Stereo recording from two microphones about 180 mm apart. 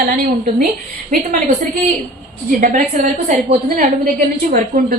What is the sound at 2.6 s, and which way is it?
A woman's voice, 45° right (ahead or behind).